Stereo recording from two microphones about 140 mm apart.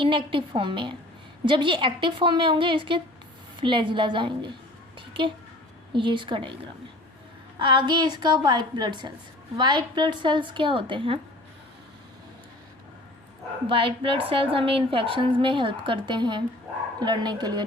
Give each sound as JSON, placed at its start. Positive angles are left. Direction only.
{"t": 0.0, "sound": "a woman's voice", "side_deg": -35}
{"t": 7.6, "sound": "a woman's voice", "side_deg": -35}
{"t": 13.7, "sound": "a woman's voice", "side_deg": -40}